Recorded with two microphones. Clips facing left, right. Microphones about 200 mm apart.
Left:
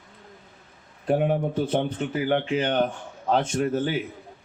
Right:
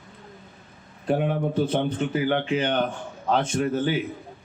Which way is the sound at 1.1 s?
45° left (ahead or behind).